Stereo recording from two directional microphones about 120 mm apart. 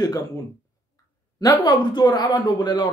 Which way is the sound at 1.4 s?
35° left (ahead or behind).